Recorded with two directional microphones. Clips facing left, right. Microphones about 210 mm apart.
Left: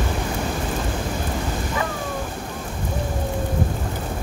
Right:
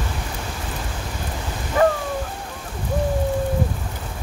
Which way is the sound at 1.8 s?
45° right (ahead or behind).